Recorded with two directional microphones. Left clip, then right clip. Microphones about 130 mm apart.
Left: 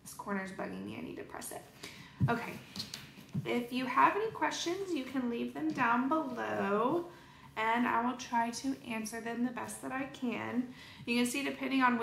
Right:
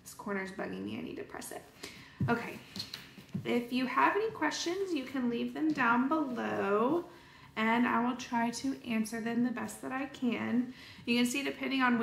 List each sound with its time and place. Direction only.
0.2 s a woman's voice: 25° left (ahead or behind)